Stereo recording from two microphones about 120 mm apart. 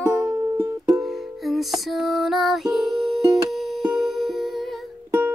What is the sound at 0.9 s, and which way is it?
Music, centre (ahead or behind).